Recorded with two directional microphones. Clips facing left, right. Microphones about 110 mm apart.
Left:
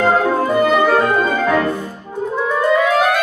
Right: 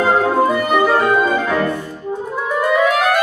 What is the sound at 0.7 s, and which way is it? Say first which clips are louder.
Music: even; 10° right (ahead or behind).